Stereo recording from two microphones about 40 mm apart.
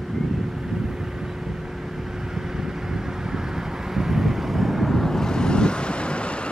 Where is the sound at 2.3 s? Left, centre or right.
Centre.